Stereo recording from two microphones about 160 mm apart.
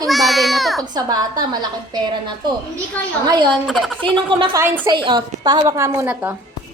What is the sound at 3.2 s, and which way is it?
Speech, 25° right (ahead or behind).